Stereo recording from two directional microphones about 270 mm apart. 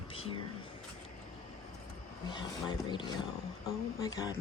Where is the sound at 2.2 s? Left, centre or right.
Centre.